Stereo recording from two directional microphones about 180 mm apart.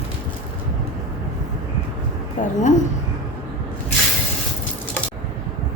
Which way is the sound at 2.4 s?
45° left (ahead or behind).